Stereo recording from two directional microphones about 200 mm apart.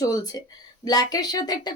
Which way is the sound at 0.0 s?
15° left (ahead or behind).